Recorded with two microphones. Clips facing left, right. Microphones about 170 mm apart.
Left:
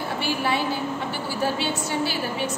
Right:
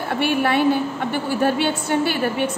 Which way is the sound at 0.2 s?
60° right (ahead or behind).